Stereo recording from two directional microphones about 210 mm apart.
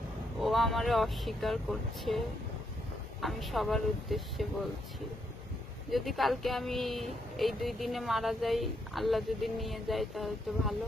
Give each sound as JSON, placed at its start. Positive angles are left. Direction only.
{"t": 0.4, "sound": "speech", "side_deg": 0}
{"t": 5.9, "sound": "speech", "side_deg": 0}